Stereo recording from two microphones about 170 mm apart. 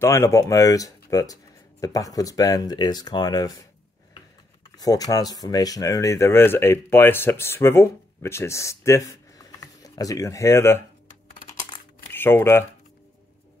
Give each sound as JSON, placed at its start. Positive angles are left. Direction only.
{"t": 0.0, "sound": "speech", "side_deg": 15}
{"t": 4.7, "sound": "speech", "side_deg": 20}
{"t": 11.3, "sound": "computer keyboard", "side_deg": 30}
{"t": 12.1, "sound": "speech", "side_deg": 15}